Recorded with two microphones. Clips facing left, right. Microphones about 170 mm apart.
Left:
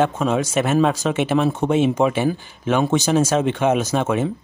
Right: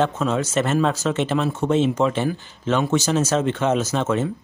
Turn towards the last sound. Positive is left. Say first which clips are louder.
# left 2 dB
turn(degrees=10)  # may be behind; listen again after turning